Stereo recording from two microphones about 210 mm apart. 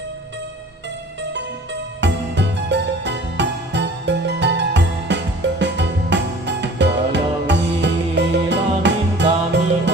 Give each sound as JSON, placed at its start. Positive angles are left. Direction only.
{"t": 2.0, "sound": "music", "side_deg": -55}